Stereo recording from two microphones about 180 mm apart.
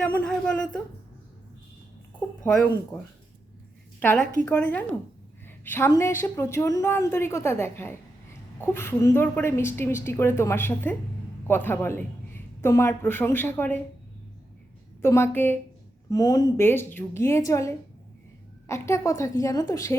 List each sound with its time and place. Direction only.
0.0 s speech: 5° left (ahead or behind)
2.4 s speech: 5° left (ahead or behind)
4.0 s a woman's voice: 10° left (ahead or behind)
15.0 s a woman's voice: 15° left (ahead or behind)